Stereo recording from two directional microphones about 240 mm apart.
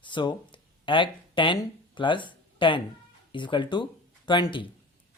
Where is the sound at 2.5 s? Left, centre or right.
Left.